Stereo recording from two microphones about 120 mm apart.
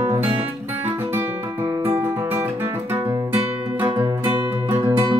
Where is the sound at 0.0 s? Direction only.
15° right (ahead or behind).